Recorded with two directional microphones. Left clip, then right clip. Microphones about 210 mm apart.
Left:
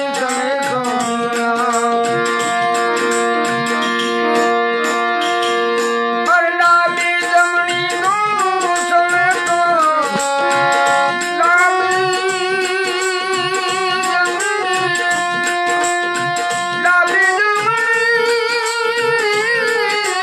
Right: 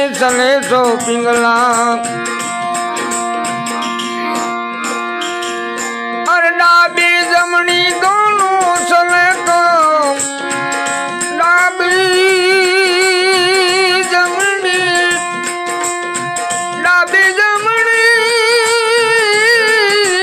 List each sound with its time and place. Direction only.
0.2 s music: 45° right (ahead or behind)
6.2 s music: 45° right (ahead or behind)
12.0 s music: 40° right (ahead or behind)
16.8 s music: 45° right (ahead or behind)